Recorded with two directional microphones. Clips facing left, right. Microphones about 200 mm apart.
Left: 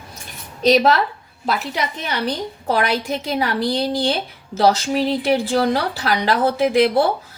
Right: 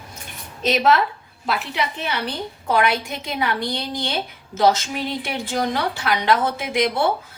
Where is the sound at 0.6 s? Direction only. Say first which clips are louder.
Left 3 dB; 35° left (ahead or behind).